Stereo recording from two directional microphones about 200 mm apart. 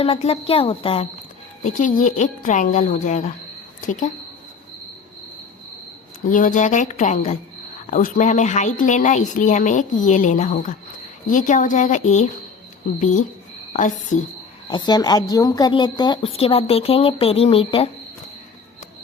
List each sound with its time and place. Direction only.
0.0 s a woman's voice: 30° left (ahead or behind)
1.6 s a woman's voice: 40° left (ahead or behind)
6.3 s a woman's voice: 40° left (ahead or behind)
14.7 s a woman's voice: 20° left (ahead or behind)